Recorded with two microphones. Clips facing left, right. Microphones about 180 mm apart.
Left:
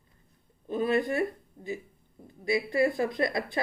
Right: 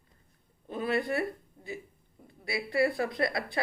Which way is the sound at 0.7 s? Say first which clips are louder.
Left 3 dB; 25° left (ahead or behind).